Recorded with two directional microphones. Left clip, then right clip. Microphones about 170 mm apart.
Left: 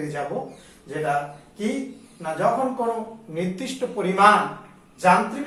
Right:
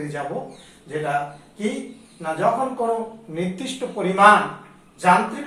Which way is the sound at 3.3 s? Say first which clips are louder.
Left 1 dB; 20° right (ahead or behind).